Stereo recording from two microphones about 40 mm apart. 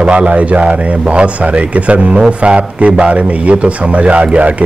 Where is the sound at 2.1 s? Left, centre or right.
Right.